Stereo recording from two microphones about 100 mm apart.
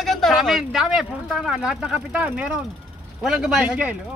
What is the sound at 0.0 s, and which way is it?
A man's voice, centre (ahead or behind).